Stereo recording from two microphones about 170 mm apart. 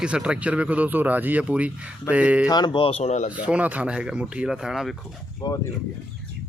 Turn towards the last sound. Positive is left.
turn(degrees=0)  # may be behind; listen again after turning